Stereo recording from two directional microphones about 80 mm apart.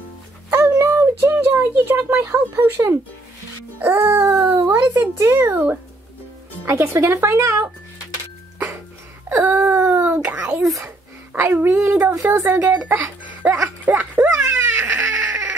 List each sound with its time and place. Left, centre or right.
0.7 s a sound: right
1.2 s speech: right
3.8 s music: right
4.6 s speech: right
9.3 s wail: right
10.2 s a sound: centre
11.3 s speech: right
12.4 s speech: right
14.4 s dog: right